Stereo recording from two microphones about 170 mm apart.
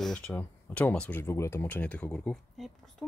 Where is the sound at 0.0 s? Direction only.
5° left (ahead or behind).